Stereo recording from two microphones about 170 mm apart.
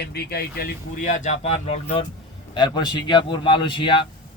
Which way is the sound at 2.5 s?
25° left (ahead or behind).